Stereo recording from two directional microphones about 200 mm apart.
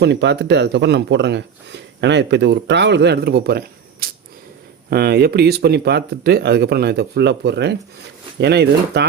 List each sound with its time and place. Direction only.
0.0 s speech: 60° right (ahead or behind)
4.0 s a sound: 50° right (ahead or behind)
4.9 s speech: 55° right (ahead or behind)